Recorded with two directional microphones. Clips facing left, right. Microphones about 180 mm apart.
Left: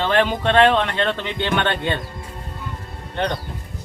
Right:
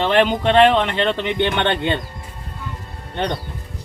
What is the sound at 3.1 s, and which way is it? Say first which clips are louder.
Speech: even; 15° right (ahead or behind).